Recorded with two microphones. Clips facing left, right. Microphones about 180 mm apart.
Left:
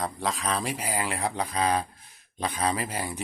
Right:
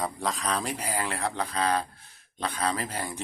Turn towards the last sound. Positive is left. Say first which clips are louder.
# left 1 dB
turn(degrees=10)  # may be behind; listen again after turning